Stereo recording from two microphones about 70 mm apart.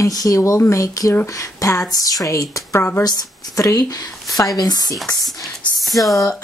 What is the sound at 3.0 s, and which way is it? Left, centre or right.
A woman's voice, left.